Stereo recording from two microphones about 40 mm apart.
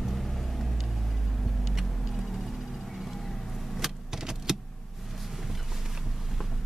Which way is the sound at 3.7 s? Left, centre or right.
Centre.